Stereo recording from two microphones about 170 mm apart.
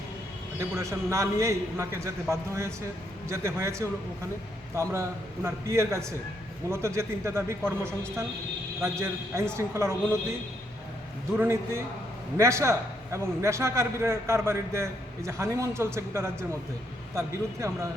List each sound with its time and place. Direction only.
0.6 s a man's voice: 15° right (ahead or behind)
8.8 s a man's voice: 15° right (ahead or behind)
11.3 s a man's voice: 15° right (ahead or behind)